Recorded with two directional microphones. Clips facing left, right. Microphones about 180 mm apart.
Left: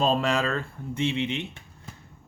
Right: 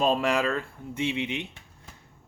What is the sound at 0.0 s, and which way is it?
Speech, 10° right (ahead or behind).